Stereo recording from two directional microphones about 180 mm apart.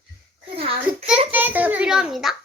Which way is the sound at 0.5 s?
30° right (ahead or behind).